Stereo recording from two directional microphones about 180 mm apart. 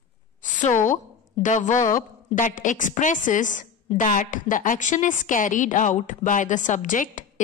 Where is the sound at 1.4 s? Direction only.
45° left (ahead or behind).